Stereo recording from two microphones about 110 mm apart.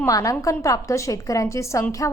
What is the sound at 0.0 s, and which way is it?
A woman's voice, 30° left (ahead or behind).